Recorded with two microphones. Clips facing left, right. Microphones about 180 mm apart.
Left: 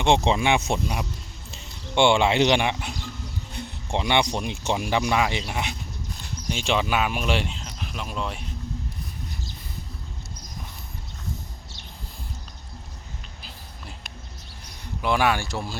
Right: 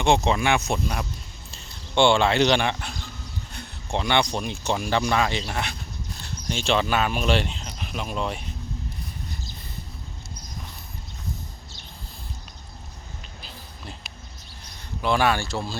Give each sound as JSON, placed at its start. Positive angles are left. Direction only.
{"t": 0.0, "sound": "speech", "side_deg": 25}
{"t": 13.4, "sound": "a sound", "side_deg": 5}
{"t": 15.0, "sound": "speech", "side_deg": 15}